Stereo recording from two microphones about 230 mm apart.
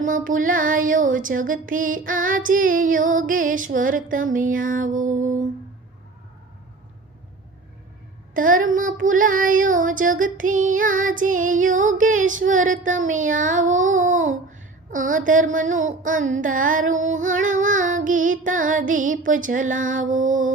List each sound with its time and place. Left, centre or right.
0.0 s child singing: right
8.3 s child singing: right